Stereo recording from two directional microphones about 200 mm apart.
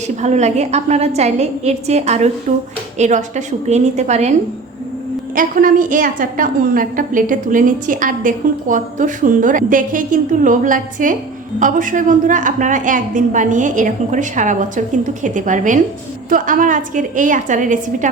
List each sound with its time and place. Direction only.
0.2 s a woman's voice: 35° right (ahead or behind)